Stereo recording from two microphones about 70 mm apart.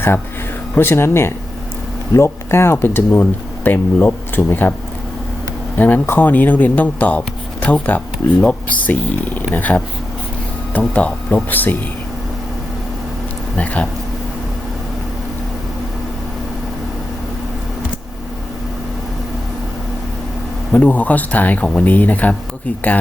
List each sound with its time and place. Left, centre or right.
0.8 s speech: left
5.7 s speech: left
13.6 s speech: centre
20.7 s speech: left